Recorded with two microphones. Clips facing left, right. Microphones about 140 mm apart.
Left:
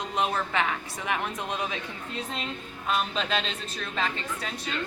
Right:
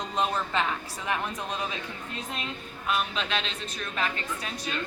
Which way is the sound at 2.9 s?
35° left (ahead or behind).